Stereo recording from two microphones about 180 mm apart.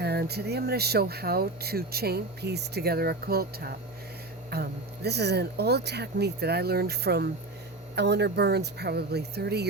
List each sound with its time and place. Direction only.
0.0 s speech: 65° right (ahead or behind)